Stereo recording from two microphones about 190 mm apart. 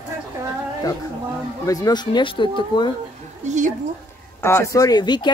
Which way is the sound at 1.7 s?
20° left (ahead or behind).